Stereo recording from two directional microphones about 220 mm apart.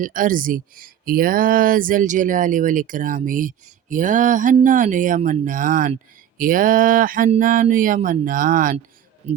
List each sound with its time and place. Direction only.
0.0 s speech: 35° right (ahead or behind)